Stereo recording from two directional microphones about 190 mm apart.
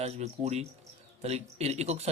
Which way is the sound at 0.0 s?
35° right (ahead or behind).